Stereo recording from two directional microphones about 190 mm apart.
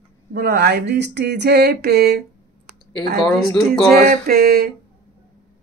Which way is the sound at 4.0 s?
50° right (ahead or behind).